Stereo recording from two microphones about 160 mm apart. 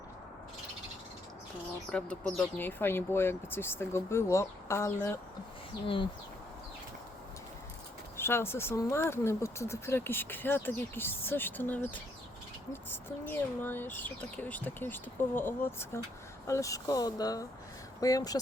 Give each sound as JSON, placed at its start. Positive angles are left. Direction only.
{"t": 1.9, "sound": "speech", "side_deg": 5}
{"t": 5.8, "sound": "speech", "side_deg": 35}
{"t": 8.1, "sound": "speech", "side_deg": 15}